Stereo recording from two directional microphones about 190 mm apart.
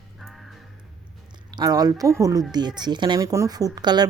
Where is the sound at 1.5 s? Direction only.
20° right (ahead or behind).